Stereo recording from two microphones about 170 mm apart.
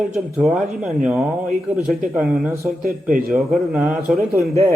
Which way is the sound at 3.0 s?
50° right (ahead or behind).